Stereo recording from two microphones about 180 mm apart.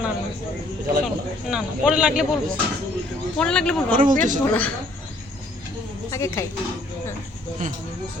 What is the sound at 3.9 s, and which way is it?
Speech, 50° right (ahead or behind).